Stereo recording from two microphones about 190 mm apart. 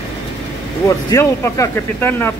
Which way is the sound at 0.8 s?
15° left (ahead or behind).